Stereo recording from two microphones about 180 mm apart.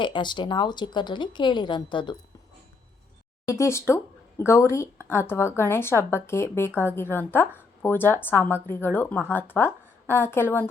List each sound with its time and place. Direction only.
0.0 s speech: 25° left (ahead or behind)
3.4 s speech: 15° left (ahead or behind)